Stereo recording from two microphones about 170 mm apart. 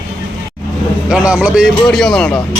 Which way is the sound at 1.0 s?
5° right (ahead or behind).